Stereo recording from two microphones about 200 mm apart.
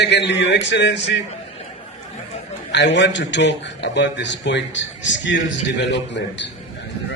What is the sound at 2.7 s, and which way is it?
A man's voice, 60° left (ahead or behind).